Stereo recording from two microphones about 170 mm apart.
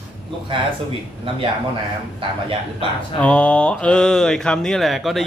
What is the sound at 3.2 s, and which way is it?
Speech, 5° left (ahead or behind).